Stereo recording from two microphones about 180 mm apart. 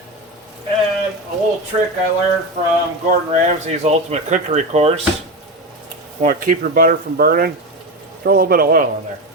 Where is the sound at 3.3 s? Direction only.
40° right (ahead or behind).